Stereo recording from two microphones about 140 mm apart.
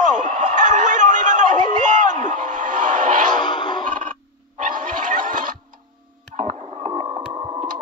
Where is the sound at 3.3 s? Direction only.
35° left (ahead or behind).